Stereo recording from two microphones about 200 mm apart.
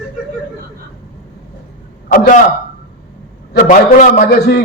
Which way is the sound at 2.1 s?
45° left (ahead or behind).